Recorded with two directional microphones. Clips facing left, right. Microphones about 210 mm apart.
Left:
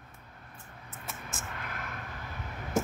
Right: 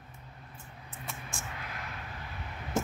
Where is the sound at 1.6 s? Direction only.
50° left (ahead or behind).